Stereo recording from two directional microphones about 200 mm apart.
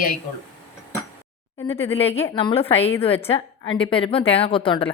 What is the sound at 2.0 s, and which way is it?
A woman's voice, 30° left (ahead or behind).